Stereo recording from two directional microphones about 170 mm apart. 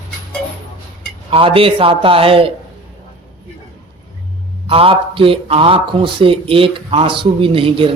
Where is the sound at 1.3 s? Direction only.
35° right (ahead or behind).